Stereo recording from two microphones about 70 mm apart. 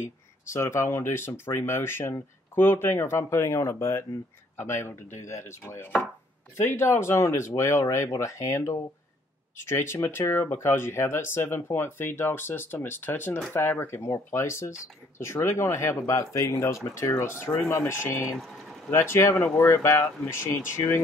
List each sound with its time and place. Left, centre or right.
0.5 s speech: left